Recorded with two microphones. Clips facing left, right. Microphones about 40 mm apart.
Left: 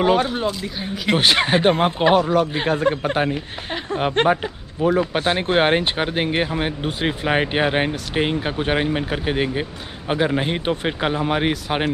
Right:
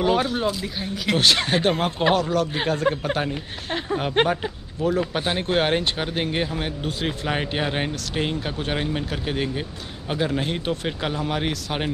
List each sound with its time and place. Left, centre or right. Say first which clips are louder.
0.0 s speech: left 3 dB; centre
1.0 s speech: left 3 dB; left
4.2 s speech: left 3 dB; centre
4.8 s speech: left 4 dB; left